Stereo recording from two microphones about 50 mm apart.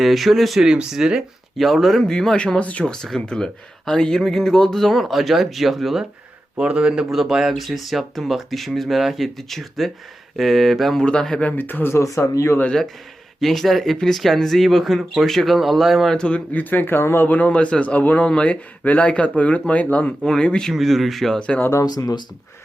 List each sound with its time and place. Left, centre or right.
0.0 s speech: centre
0.6 s speech: centre
1.5 s speech: centre; by 2.8 s left
2.8 s speech: centre
6.6 s speech: centre
11.0 s a man's voice: centre
11.4 s speech: left
12.0 s speech: left
13.4 s speech: centre
16.1 s speech: left
17.2 s a man's voice: left
18.3 s a man's voice: centre
20.7 s speech: centre
21.3 s a man's voice: centre